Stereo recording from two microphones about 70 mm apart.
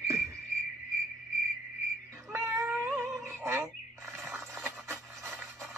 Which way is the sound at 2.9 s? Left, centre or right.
Right.